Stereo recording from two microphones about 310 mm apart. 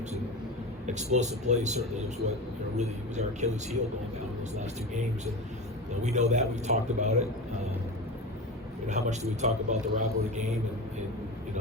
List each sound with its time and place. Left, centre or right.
0.9 s a man's voice: right
8.9 s a man's voice: right